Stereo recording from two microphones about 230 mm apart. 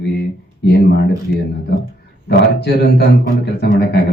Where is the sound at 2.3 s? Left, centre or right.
Left.